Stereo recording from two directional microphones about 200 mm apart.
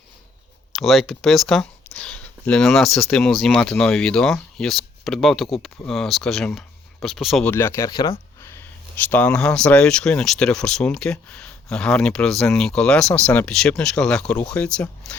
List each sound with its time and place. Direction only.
0.7 s speech: centre (ahead or behind)
7.5 s speech: 15° left (ahead or behind)
8.4 s speech: 10° left (ahead or behind)